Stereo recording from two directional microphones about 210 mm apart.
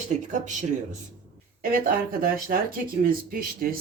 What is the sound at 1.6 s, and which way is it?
Speech, 45° right (ahead or behind).